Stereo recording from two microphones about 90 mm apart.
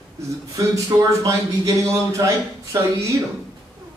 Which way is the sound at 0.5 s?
40° right (ahead or behind).